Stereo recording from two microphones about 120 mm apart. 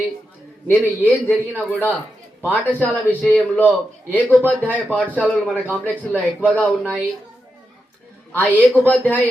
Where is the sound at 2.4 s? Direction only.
15° left (ahead or behind).